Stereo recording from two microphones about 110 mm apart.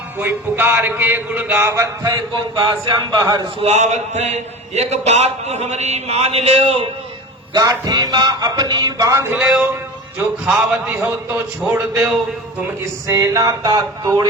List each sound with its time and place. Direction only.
0.2 s speech: 20° right (ahead or behind)
1.6 s a sound: 30° right (ahead or behind)
3.2 s speech: 40° right (ahead or behind)
3.6 s a man's voice: 90° right; by 6.8 s 70° right (ahead or behind)
7.5 s speech: 35° right (ahead or behind)
9.3 s a man's voice: 5° right (ahead or behind)
10.8 s speech: 15° right (ahead or behind)
12.8 s speech: 30° right (ahead or behind)